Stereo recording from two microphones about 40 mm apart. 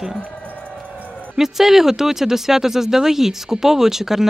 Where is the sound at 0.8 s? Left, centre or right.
Right.